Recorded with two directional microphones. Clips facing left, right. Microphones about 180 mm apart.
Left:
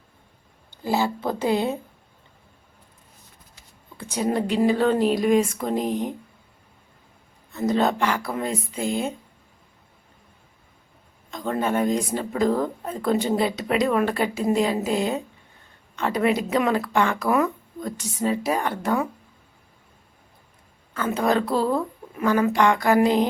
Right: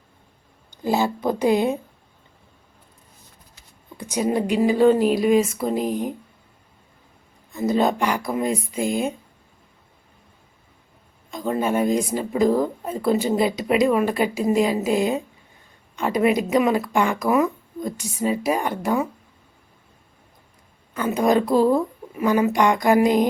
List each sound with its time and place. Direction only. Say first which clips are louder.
0.8 s speech: right 2 dB; 20° right (ahead or behind)
3.9 s speech: right 2 dB; 15° right (ahead or behind)
7.5 s speech: right 1 dB; 10° right (ahead or behind)
11.3 s speech: right 2 dB; 10° right (ahead or behind)
20.9 s speech: right 3 dB; 15° right (ahead or behind)